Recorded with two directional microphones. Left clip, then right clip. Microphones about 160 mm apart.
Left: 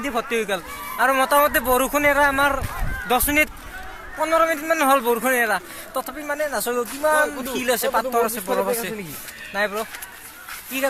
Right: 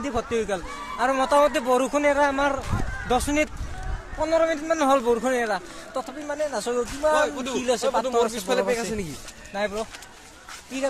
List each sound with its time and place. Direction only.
0.0 s a man's voice: 15° left (ahead or behind)
7.3 s a man's voice: 10° left (ahead or behind)
9.6 s a man's voice: 10° left (ahead or behind)